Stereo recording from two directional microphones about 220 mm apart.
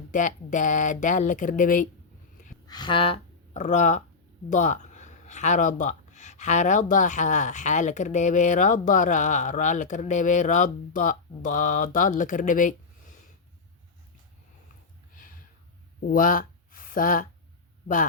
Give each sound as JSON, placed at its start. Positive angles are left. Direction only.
{"t": 0.1, "sound": "speech", "side_deg": 35}
{"t": 2.6, "sound": "speech", "side_deg": 20}
{"t": 16.0, "sound": "speech", "side_deg": 40}